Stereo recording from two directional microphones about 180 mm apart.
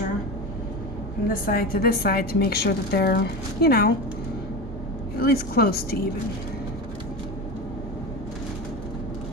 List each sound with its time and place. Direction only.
1.3 s a woman's voice: 55° left (ahead or behind)
5.2 s a woman's voice: 60° left (ahead or behind)